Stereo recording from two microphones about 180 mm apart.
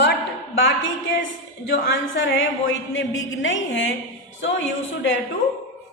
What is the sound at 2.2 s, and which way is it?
A woman's voice, 90° left.